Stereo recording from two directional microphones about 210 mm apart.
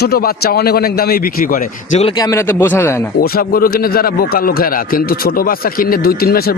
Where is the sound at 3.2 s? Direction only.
45° left (ahead or behind).